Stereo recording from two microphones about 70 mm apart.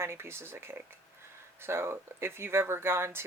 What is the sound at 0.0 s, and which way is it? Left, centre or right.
Speech, right.